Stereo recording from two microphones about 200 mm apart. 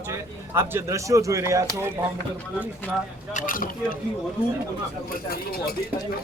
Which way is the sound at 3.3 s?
45° left (ahead or behind).